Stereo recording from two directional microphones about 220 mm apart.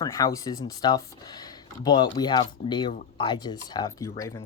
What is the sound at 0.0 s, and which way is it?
Speech, 15° left (ahead or behind).